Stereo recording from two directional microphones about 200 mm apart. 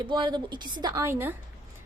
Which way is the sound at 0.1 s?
20° right (ahead or behind).